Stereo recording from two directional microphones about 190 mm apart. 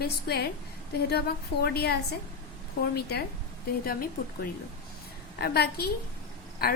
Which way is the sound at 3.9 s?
50° left (ahead or behind).